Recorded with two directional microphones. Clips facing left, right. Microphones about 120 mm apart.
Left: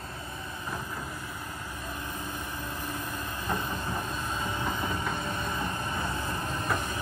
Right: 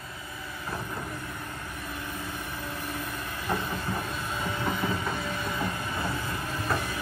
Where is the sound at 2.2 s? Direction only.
20° left (ahead or behind).